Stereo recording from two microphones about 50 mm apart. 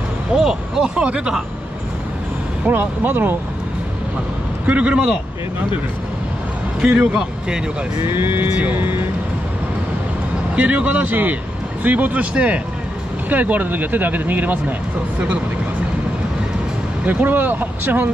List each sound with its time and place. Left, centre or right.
0.4 s speech: centre
0.9 s speech: right
2.7 s speech: right
4.6 s speech: right
6.8 s speech: right
7.2 s speech: centre
8.0 s speech: right
8.4 s speech: right
8.7 s speech: right
10.5 s speech: right
17.0 s speech: right